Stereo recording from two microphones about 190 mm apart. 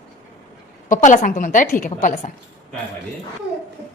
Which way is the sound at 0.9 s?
40° left (ahead or behind).